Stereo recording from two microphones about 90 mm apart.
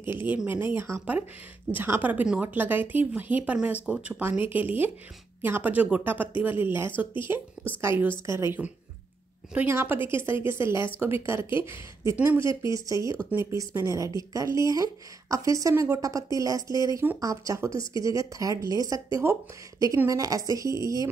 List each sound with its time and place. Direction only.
0.0 s speech: 25° right (ahead or behind)
9.5 s speech: 20° right (ahead or behind); by 18.9 s 40° right (ahead or behind)
20.1 s speech: 40° right (ahead or behind)